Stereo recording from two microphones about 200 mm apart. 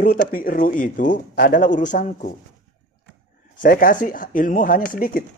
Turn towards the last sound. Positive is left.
turn(degrees=45)  # may be behind; listen again after turning